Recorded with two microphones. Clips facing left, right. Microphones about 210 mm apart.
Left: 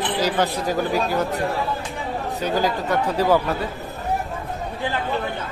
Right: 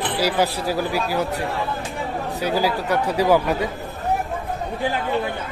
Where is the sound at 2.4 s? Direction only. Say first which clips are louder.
Right 1 dB; 10° right (ahead or behind).